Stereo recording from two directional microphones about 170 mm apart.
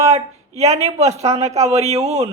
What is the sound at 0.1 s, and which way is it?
Speech, 40° right (ahead or behind).